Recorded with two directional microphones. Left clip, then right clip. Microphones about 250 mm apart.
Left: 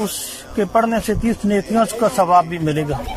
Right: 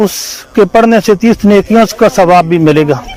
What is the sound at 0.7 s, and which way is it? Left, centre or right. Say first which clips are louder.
A man's voice: right 9 dB; right.